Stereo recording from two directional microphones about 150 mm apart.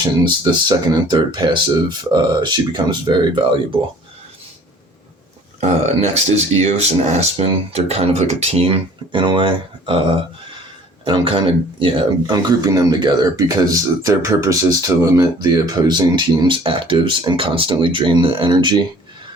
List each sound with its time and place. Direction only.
0.3 s speech: 30° right (ahead or behind)
5.5 s speech: 45° right (ahead or behind)
11.0 s speech: 35° right (ahead or behind)